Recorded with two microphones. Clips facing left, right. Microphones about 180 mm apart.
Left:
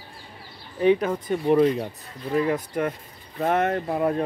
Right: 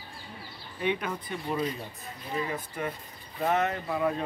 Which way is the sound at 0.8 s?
40° left (ahead or behind).